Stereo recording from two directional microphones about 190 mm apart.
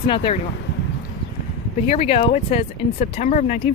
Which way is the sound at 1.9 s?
35° left (ahead or behind).